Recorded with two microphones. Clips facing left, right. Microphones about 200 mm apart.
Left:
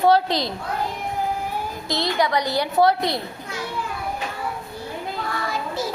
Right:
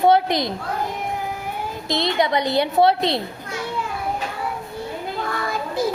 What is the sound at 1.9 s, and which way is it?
A woman's voice, 20° right (ahead or behind).